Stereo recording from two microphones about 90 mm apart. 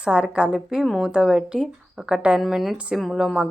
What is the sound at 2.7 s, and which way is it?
Speech, 10° right (ahead or behind).